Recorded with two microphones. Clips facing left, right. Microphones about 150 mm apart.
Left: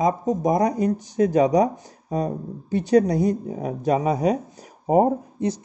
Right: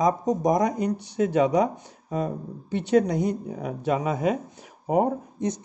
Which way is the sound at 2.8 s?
40° left (ahead or behind).